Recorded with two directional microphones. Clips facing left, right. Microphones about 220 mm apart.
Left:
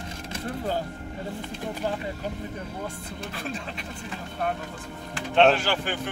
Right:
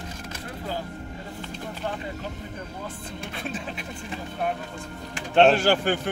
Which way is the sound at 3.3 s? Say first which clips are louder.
Right 2 dB; 5° right (ahead or behind).